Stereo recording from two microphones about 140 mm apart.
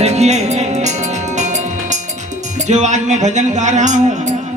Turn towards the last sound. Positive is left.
turn(degrees=-60)  # may be behind; listen again after turning